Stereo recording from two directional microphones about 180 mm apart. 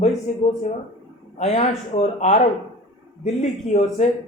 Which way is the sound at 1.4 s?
40° left (ahead or behind).